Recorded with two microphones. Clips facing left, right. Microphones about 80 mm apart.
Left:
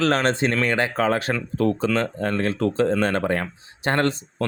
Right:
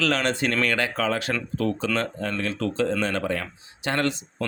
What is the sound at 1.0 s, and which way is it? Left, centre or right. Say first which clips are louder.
Speech: left 4 dB; left.